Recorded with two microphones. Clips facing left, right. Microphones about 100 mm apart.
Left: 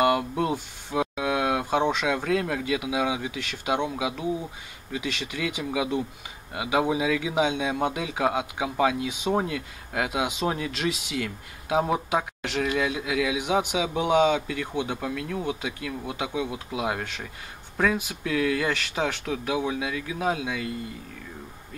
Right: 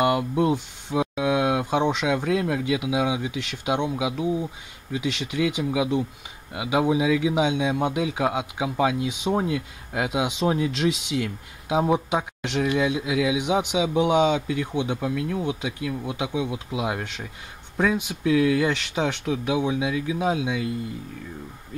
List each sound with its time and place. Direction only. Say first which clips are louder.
0.0 s speech: right 2 dB; 5° right (ahead or behind)